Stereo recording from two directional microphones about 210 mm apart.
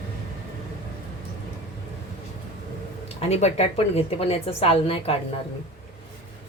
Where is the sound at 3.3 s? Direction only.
30° left (ahead or behind).